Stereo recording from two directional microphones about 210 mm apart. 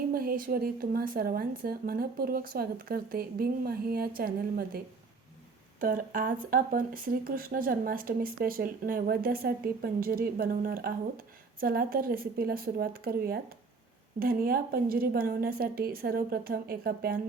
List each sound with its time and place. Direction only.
0.1 s speech: 45° right (ahead or behind)
5.8 s speech: 40° right (ahead or behind)